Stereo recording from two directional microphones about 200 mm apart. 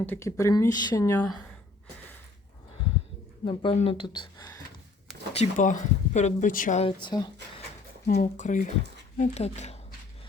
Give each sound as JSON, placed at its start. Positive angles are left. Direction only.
{"t": 0.0, "sound": "speech", "side_deg": 10}
{"t": 3.4, "sound": "speech", "side_deg": 25}
{"t": 5.4, "sound": "speech", "side_deg": 40}
{"t": 6.8, "sound": "speech", "side_deg": 20}
{"t": 8.0, "sound": "speech", "side_deg": 40}